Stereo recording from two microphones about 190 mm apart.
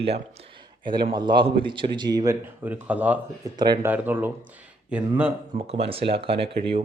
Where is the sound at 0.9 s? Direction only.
25° right (ahead or behind); by 5.3 s 10° right (ahead or behind).